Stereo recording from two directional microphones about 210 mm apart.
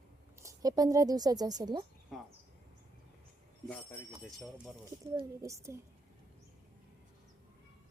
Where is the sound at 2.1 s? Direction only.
Centre (ahead or behind).